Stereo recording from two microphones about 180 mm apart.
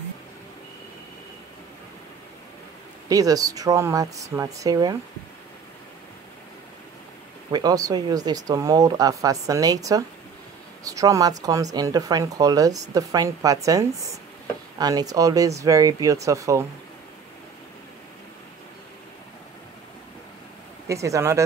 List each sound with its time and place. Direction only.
3.1 s speech: 20° right (ahead or behind)
7.5 s speech: 20° right (ahead or behind)
20.8 s speech: 15° right (ahead or behind)